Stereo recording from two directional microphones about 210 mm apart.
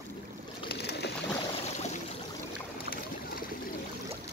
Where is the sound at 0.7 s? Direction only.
50° left (ahead or behind).